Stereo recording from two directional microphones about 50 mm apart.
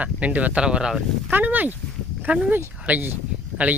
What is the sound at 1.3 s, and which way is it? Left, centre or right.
Speech, right.